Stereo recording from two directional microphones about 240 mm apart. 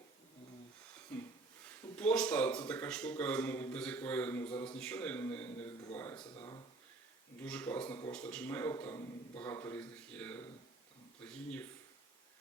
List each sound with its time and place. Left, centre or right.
1.1 s a sound: centre
1.6 s speech: centre
6.1 s speech: left
7.4 s speech: centre